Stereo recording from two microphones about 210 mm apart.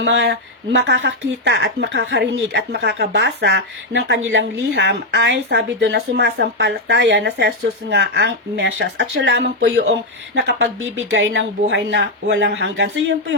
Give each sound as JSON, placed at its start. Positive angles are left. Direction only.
{"t": 0.0, "sound": "speech", "side_deg": -55}